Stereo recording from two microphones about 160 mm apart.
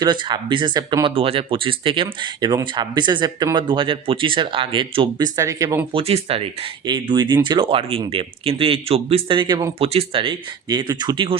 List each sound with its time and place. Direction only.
0.0 s speech: 30° right (ahead or behind)
5.4 s speech: 20° right (ahead or behind)
5.9 s speech: 40° right (ahead or behind)